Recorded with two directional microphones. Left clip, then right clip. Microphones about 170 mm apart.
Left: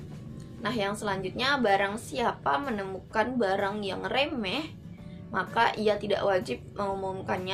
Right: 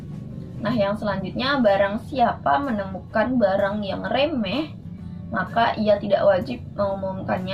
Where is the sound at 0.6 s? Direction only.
15° left (ahead or behind).